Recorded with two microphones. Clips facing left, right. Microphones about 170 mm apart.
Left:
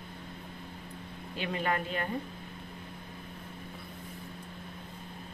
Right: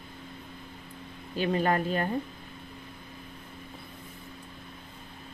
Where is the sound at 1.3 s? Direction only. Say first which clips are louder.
Right 6 dB; 40° right (ahead or behind).